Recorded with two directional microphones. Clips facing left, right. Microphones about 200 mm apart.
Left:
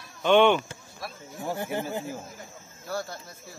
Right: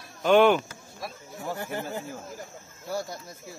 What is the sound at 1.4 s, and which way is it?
Speech, 20° left (ahead or behind).